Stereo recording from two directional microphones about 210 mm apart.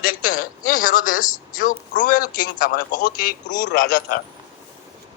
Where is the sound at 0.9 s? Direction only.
40° left (ahead or behind).